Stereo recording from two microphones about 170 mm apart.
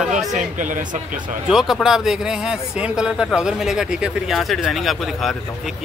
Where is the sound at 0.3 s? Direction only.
50° right (ahead or behind).